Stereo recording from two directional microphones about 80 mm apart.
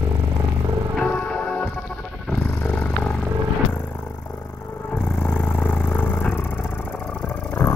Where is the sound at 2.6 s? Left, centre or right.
Centre.